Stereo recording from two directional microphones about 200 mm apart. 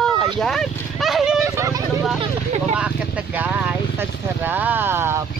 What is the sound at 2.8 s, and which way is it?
Speech, 5° right (ahead or behind).